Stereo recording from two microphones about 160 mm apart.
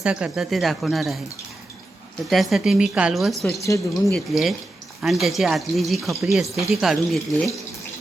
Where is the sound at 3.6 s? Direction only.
20° left (ahead or behind).